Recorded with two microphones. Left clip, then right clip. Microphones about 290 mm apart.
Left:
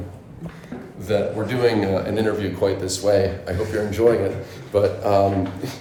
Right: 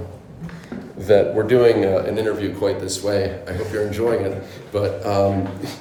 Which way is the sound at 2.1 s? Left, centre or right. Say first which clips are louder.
Right 1 dB; centre.